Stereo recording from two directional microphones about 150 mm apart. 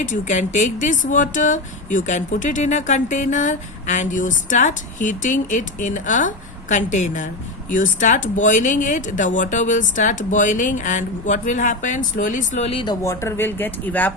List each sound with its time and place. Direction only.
0.0 s speech: 55° left (ahead or behind); by 13.0 s 35° left (ahead or behind)
13.0 s speech: 20° left (ahead or behind)